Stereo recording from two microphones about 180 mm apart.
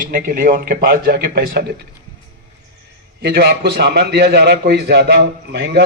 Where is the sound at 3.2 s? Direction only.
65° right (ahead or behind).